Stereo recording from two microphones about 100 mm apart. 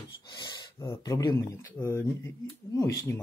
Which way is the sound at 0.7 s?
35° left (ahead or behind).